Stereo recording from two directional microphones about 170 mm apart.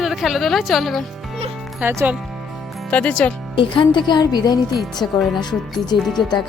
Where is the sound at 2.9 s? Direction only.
5° left (ahead or behind).